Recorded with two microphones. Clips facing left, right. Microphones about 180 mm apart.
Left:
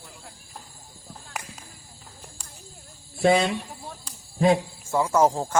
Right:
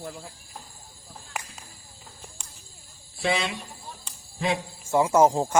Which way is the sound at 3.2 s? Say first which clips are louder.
Left 7 dB; 45° left (ahead or behind).